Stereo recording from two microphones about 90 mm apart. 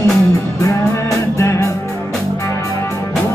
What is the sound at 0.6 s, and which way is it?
Music, 35° left (ahead or behind).